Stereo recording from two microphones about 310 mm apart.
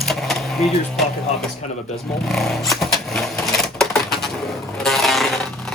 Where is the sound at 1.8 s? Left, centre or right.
Centre.